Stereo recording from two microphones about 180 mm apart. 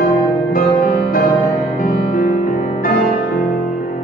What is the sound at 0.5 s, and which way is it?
Music, 50° left (ahead or behind).